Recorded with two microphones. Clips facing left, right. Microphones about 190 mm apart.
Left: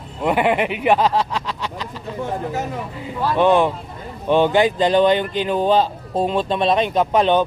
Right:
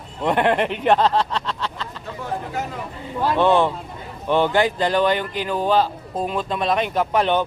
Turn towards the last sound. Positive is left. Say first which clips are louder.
# left 3 dB
turn(degrees=20)  # may be behind; listen again after turning